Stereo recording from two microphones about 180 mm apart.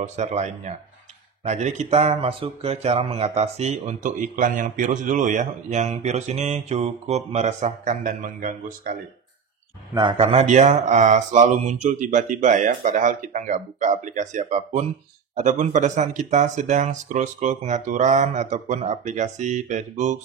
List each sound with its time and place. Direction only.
0.0 s speech: 40° right (ahead or behind)
9.9 s speech: 30° right (ahead or behind)